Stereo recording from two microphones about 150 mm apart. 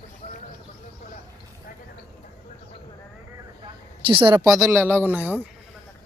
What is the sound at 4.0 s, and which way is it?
Speech, 35° right (ahead or behind).